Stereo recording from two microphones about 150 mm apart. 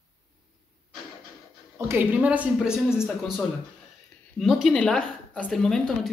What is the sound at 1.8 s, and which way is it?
A woman's voice, 15° right (ahead or behind).